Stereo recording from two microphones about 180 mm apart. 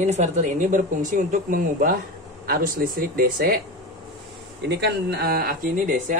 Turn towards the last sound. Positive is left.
turn(degrees=-55)  # may be behind; listen again after turning